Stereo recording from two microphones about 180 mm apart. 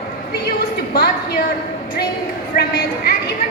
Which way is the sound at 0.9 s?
60° left (ahead or behind).